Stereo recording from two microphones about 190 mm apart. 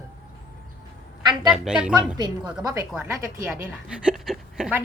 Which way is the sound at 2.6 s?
15° right (ahead or behind).